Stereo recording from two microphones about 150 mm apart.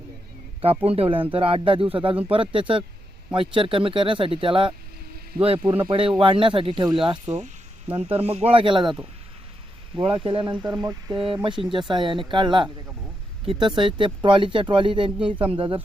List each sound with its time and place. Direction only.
0.9 s speech: 40° right (ahead or behind)
7.3 s speech: 50° right (ahead or behind)
7.9 s speech: 40° right (ahead or behind)
10.6 s speech: 25° right (ahead or behind)